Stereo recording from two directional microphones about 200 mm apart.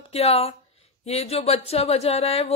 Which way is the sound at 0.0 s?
30° left (ahead or behind).